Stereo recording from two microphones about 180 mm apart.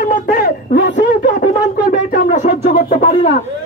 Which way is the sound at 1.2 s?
50° left (ahead or behind).